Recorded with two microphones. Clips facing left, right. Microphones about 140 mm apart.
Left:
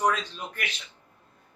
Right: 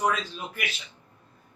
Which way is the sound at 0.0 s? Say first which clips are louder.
Left 1 dB; 5° right (ahead or behind).